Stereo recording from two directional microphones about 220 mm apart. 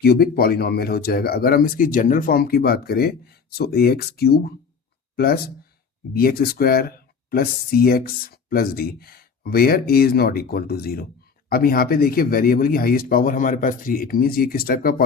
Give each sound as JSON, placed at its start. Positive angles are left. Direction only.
{"t": 0.0, "sound": "speech", "side_deg": 45}